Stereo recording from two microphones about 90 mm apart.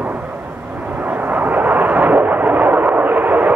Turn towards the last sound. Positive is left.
turn(degrees=-20)  # may be behind; listen again after turning